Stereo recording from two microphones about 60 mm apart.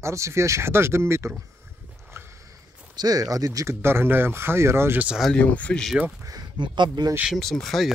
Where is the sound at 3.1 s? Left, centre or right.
Right.